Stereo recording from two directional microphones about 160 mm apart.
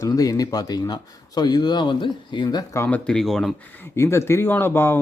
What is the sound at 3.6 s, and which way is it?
Speech, 10° left (ahead or behind).